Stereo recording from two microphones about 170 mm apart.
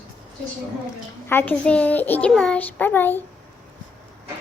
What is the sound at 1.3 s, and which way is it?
A woman's voice, 10° left (ahead or behind).